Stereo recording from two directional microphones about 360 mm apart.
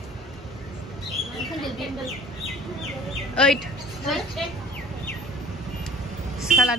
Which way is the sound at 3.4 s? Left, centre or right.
Centre.